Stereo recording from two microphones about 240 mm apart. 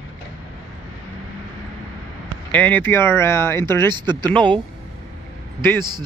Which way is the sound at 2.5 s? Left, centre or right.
Centre.